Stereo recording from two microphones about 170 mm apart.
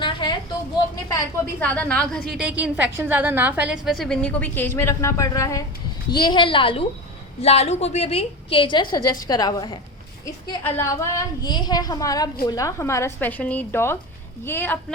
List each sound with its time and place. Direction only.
0.0 s a sound: 30° left (ahead or behind)
1.0 s a woman's voice: 20° left (ahead or behind)
1.6 s a woman's voice: 10° left (ahead or behind)
2.4 s a woman's voice: 10° right (ahead or behind); by 14.9 s 10° left (ahead or behind)